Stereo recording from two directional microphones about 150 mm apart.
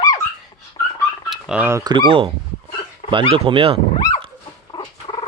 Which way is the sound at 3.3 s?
40° right (ahead or behind).